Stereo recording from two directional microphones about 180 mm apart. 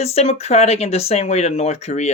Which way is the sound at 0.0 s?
35° left (ahead or behind).